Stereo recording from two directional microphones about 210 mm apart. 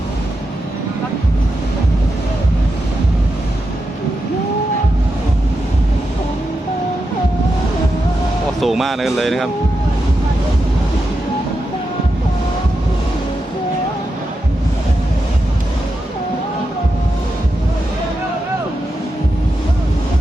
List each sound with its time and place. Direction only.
8.6 s speech: centre (ahead or behind)